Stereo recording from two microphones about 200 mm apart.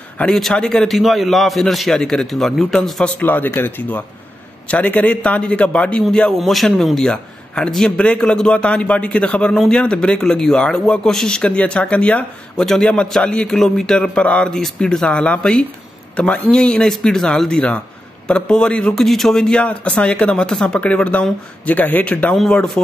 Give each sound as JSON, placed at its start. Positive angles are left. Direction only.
{"t": 0.2, "sound": "a man's voice", "side_deg": 0}